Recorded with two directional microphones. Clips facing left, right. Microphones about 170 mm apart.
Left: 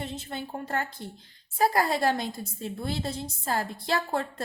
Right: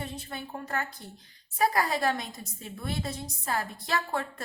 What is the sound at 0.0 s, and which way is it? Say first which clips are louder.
A woman's voice: left 3 dB; 25° left (ahead or behind).